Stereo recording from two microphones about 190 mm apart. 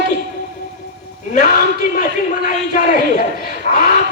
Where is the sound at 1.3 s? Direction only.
45° left (ahead or behind).